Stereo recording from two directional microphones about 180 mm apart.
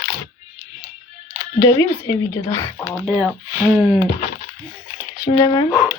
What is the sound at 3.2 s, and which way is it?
Speech, 5° left (ahead or behind).